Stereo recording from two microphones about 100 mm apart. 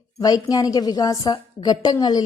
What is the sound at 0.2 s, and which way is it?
A woman's voice, 40° left (ahead or behind).